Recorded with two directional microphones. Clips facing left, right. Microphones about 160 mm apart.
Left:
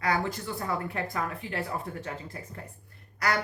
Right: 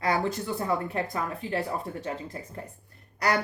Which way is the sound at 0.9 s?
25° right (ahead or behind).